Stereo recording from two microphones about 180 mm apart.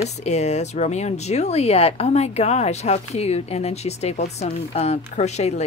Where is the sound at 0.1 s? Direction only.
40° left (ahead or behind).